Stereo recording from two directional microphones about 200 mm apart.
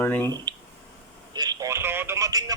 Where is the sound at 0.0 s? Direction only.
10° left (ahead or behind).